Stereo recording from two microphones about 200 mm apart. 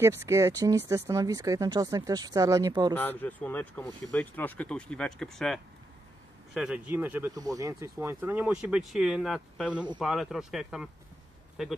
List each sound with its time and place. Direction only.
0.0 s speech: 15° right (ahead or behind)
2.9 s speech: 10° left (ahead or behind)